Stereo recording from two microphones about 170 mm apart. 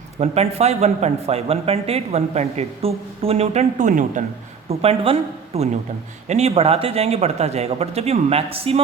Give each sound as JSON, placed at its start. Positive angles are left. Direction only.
{"t": 0.2, "sound": "speech", "side_deg": -40}
{"t": 4.7, "sound": "speech", "side_deg": -35}